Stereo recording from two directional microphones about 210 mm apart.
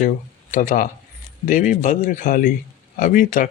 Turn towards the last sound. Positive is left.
turn(degrees=40)  # may be behind; listen again after turning